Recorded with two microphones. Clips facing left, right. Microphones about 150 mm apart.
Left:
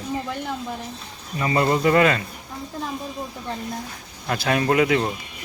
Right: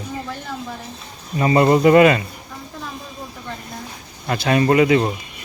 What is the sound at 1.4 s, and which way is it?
Speech, 25° right (ahead or behind).